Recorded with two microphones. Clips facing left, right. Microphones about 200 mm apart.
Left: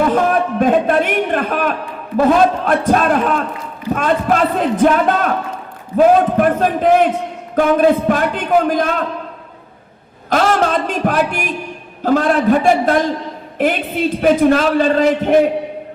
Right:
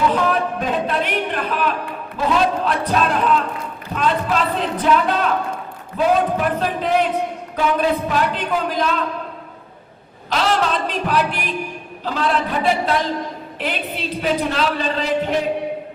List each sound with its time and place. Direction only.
0.6 s a man's voice: 50° left (ahead or behind)
10.2 s a man's voice: 50° left (ahead or behind)